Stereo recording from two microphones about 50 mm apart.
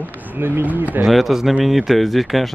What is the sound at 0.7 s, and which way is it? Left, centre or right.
Speech, right.